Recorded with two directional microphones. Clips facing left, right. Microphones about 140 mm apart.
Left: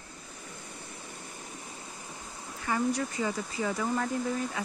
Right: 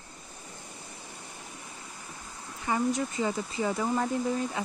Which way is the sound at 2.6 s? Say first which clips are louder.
Right 1 dB; 20° right (ahead or behind).